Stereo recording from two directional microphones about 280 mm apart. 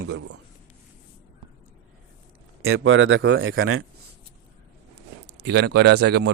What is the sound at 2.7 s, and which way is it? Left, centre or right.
A man's voice, right.